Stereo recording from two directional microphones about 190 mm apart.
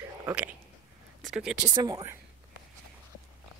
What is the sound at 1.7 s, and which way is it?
Speech, 20° right (ahead or behind).